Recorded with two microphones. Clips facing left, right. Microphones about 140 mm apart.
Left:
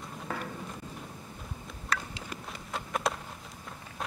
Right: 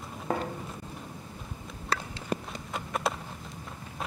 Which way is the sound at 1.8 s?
30° right (ahead or behind).